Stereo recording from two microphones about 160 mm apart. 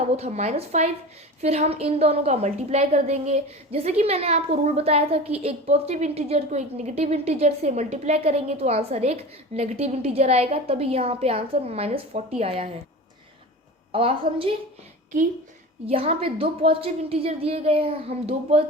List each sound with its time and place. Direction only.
0.2 s a woman's voice: 45° right (ahead or behind)
13.9 s a woman's voice: 35° right (ahead or behind)
15.9 s a woman's voice: 35° right (ahead or behind)